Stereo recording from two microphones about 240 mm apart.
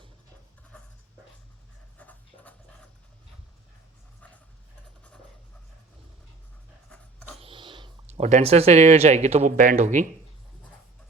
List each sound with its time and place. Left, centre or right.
2.0 s writing: centre
6.9 s dog: centre
7.4 s speech: right